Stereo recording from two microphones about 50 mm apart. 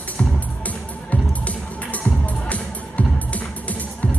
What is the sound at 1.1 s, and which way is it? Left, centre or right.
Music, left.